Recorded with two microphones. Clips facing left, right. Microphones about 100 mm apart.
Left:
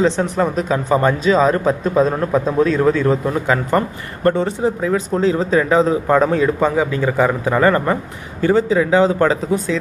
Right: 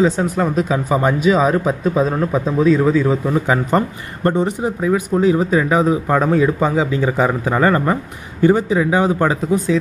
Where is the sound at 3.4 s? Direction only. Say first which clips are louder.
Left 2 dB; 20° right (ahead or behind).